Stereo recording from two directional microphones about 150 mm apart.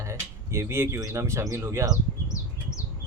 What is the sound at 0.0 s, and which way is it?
Speech, 20° right (ahead or behind).